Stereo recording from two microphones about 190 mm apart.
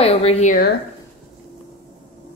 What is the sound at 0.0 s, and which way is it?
Speech, 30° left (ahead or behind).